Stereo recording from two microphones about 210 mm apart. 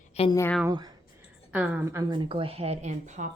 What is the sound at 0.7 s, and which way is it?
Speech, 20° right (ahead or behind).